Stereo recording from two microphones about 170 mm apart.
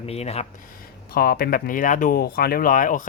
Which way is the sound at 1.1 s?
60° left (ahead or behind).